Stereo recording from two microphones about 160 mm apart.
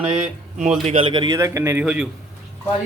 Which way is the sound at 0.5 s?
50° right (ahead or behind).